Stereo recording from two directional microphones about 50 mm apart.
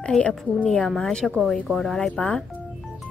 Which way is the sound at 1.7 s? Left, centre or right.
Centre.